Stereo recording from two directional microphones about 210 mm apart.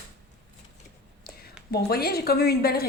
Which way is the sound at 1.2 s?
45° left (ahead or behind).